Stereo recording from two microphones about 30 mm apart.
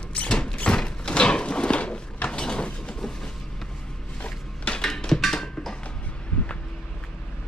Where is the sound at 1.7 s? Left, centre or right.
Left.